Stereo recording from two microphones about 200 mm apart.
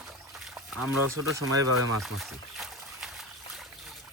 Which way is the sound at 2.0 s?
Centre (ahead or behind).